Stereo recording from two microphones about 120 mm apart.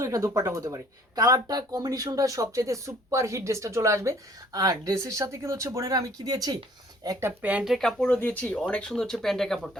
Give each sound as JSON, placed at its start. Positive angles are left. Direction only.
{"t": 0.0, "sound": "speech", "side_deg": -25}
{"t": 7.3, "sound": "speech", "side_deg": -10}